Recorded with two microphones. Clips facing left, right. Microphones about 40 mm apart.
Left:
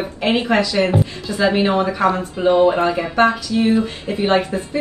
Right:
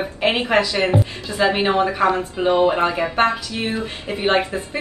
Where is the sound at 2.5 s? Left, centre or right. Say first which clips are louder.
Left 3 dB; centre.